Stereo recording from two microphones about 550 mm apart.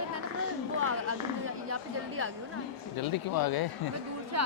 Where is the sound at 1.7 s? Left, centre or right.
Right.